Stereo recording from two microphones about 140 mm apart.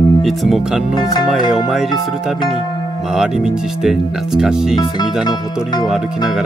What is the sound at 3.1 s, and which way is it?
Speech, 5° right (ahead or behind).